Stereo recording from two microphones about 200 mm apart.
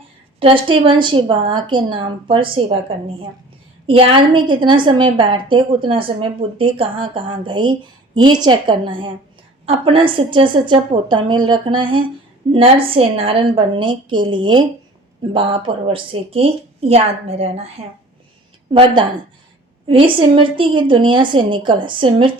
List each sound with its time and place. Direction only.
0.3 s a woman's voice: 25° right (ahead or behind)
3.8 s a woman's voice: 25° right (ahead or behind)
18.7 s a woman's voice: 25° right (ahead or behind)